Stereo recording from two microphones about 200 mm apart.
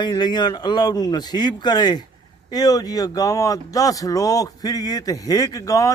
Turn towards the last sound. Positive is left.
turn(degrees=15)  # may be behind; listen again after turning